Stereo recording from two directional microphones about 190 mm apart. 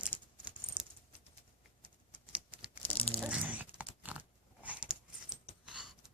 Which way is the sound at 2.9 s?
30° left (ahead or behind).